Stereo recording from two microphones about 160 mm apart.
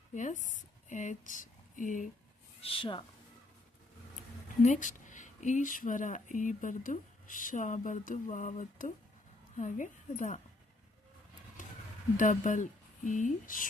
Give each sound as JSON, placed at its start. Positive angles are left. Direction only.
{"t": 0.1, "sound": "speech", "side_deg": 50}
{"t": 2.6, "sound": "speech", "side_deg": 35}
{"t": 4.6, "sound": "speech", "side_deg": 50}
{"t": 12.1, "sound": "speech", "side_deg": 55}